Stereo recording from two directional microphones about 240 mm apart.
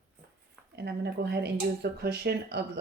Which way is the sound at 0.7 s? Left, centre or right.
Right.